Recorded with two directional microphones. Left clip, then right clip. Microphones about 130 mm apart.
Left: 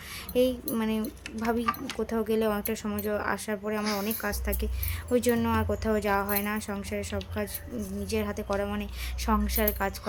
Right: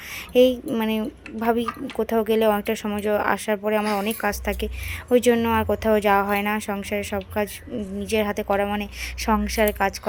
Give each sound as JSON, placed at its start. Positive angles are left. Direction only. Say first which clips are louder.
{"t": 0.3, "sound": "a woman's voice", "louder": "right 9 dB", "side_deg": -30}